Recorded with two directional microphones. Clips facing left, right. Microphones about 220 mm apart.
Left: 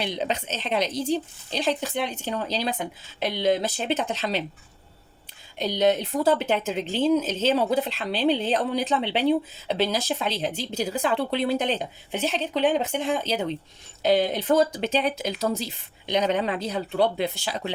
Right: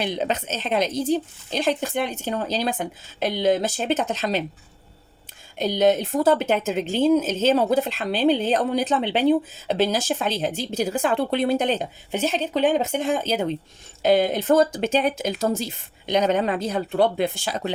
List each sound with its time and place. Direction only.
0.0 s a woman's voice: 50° right (ahead or behind)
5.5 s a woman's voice: 50° right (ahead or behind)